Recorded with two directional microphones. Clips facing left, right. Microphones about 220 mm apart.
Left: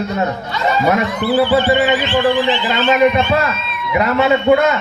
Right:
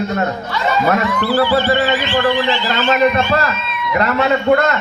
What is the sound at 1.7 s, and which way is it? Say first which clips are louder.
A man's voice: left 2 dB; 20° left (ahead or behind).